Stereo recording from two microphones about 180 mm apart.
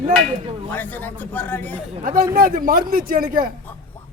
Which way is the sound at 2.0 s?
50° right (ahead or behind).